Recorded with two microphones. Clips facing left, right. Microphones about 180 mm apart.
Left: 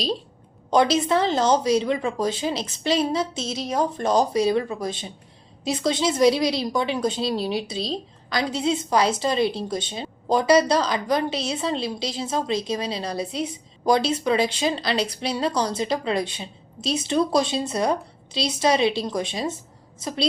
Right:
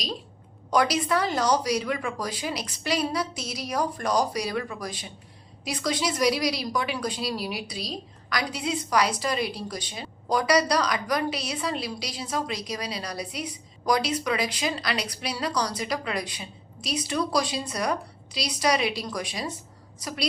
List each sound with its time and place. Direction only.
0.7 s a woman's voice: 25° left (ahead or behind)